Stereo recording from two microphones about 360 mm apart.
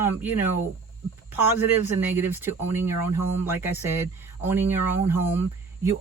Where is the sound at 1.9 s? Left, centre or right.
Centre.